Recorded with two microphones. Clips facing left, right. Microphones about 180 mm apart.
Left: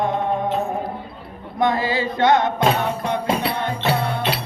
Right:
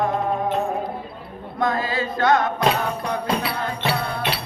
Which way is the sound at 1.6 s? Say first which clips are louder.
Left 3 dB; 25° left (ahead or behind).